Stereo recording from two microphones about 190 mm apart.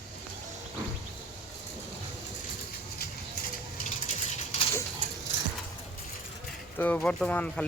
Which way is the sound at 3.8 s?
40° left (ahead or behind).